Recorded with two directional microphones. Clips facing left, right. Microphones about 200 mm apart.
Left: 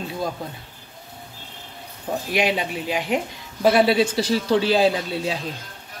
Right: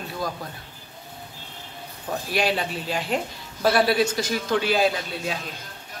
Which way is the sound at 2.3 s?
15° left (ahead or behind).